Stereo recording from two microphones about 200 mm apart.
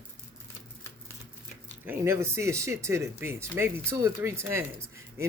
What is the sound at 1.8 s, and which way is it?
Speech, 10° right (ahead or behind).